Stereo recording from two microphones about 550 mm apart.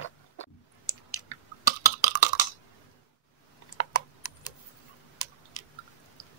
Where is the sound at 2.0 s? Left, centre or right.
Left.